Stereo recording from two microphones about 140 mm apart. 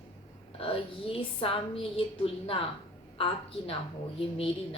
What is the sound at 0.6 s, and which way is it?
A woman's voice, 40° left (ahead or behind).